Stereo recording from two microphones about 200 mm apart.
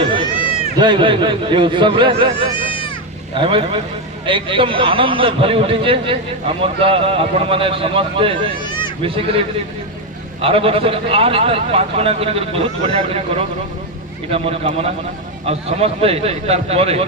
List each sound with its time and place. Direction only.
0.3 s run: 25° left (ahead or behind)
0.8 s a man's voice: 25° right (ahead or behind)
3.3 s a man's voice: 25° right (ahead or behind)
8.6 s a sound: 20° left (ahead or behind)
9.0 s a man's voice: 25° right (ahead or behind)
10.4 s a man's voice: 30° right (ahead or behind)